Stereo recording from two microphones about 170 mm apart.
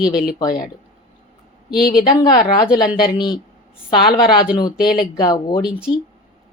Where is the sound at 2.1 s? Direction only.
25° left (ahead or behind).